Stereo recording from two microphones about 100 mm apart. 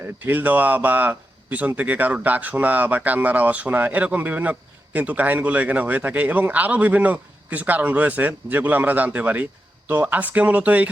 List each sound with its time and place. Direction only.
0.3 s a man's voice: 15° right (ahead or behind)